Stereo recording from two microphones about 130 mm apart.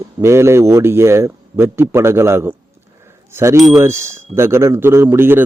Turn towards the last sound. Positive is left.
turn(degrees=-15)  # may be behind; listen again after turning